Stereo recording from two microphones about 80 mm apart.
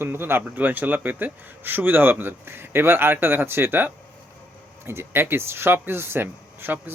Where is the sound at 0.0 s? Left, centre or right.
Right.